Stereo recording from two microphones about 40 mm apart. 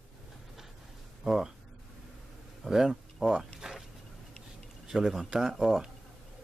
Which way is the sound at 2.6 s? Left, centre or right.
Centre.